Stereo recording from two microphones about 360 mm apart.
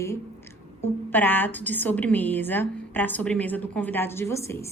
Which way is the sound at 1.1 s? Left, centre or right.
Centre.